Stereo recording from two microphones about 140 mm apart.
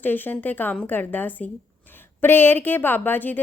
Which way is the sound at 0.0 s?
15° left (ahead or behind).